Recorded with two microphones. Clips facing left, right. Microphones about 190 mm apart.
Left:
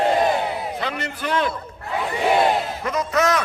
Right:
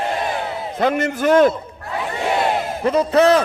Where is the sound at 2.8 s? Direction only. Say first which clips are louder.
Right 9 dB; 30° right (ahead or behind).